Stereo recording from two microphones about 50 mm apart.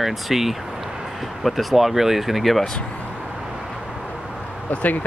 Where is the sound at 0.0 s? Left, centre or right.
Centre.